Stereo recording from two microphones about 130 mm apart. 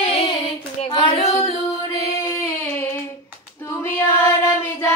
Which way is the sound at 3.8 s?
20° left (ahead or behind).